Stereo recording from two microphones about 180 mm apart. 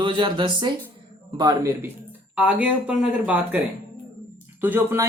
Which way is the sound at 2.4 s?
5° right (ahead or behind).